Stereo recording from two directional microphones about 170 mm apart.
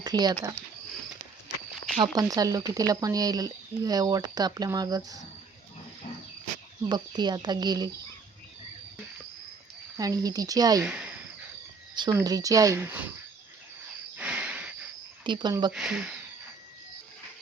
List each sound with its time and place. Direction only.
0.0 s speech: 25° right (ahead or behind)
2.0 s speech: 20° right (ahead or behind)
6.8 s speech: 25° right (ahead or behind)
10.0 s speech: 20° right (ahead or behind)
10.8 s speech: 5° right (ahead or behind)
11.9 s speech: 25° right (ahead or behind)
14.2 s cricket: 10° right (ahead or behind)
15.2 s speech: 25° right (ahead or behind)
15.7 s speech: 5° right (ahead or behind)